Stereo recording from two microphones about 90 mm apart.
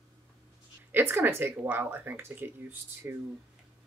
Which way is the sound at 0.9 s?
25° right (ahead or behind).